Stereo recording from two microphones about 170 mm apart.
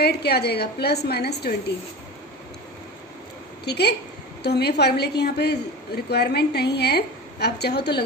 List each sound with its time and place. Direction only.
0.0 s a woman's voice: 70° left (ahead or behind)
3.6 s a woman's voice: 75° left (ahead or behind)